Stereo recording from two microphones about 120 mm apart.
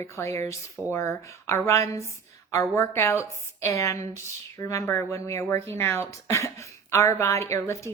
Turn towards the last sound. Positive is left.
turn(degrees=25)  # may be behind; listen again after turning